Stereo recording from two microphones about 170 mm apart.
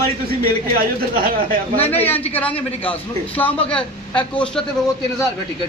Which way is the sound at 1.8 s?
35° left (ahead or behind).